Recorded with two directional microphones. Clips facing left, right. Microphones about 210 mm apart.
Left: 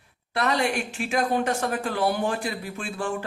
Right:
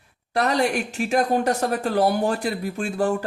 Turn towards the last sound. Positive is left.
turn(degrees=-40)  # may be behind; listen again after turning